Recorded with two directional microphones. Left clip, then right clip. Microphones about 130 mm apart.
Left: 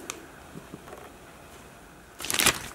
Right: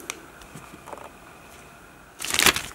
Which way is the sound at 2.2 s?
5° right (ahead or behind).